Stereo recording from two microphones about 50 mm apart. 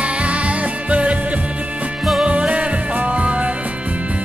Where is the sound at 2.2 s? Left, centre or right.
Right.